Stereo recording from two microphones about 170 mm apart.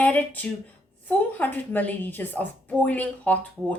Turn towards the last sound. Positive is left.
turn(degrees=10)  # may be behind; listen again after turning